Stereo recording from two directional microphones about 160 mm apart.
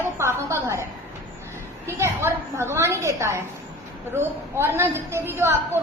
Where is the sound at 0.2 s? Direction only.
15° right (ahead or behind).